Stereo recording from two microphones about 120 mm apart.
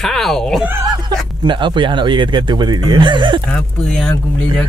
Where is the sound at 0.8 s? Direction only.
40° right (ahead or behind).